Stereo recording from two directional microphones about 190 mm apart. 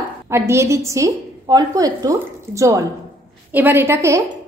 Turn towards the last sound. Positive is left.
turn(degrees=-15)  # may be behind; listen again after turning